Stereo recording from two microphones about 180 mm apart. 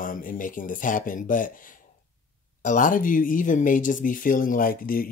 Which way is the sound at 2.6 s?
45° left (ahead or behind).